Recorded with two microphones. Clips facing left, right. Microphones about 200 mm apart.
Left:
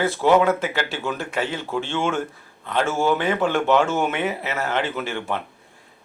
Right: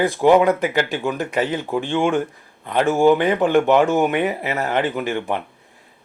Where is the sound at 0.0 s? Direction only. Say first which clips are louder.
Right 3 dB; 15° right (ahead or behind).